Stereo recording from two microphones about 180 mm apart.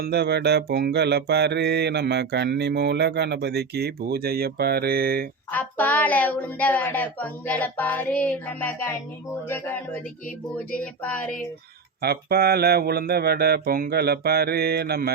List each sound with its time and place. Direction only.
0.0 s mantra: 65° right (ahead or behind)
5.5 s speech: 10° left (ahead or behind)
12.0 s speech: 60° right (ahead or behind)